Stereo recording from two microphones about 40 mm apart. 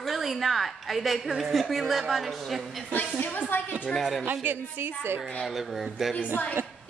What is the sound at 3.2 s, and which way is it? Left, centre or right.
Speech, left.